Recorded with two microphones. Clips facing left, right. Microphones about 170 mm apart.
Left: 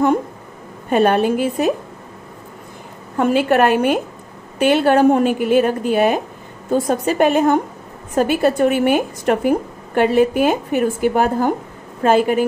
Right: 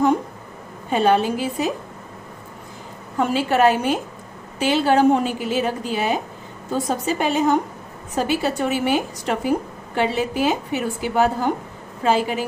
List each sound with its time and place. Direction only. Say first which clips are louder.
0.8 s a woman's voice: left 3 dB; 55° left (ahead or behind)
3.2 s a woman's voice: left 4 dB; 60° left (ahead or behind)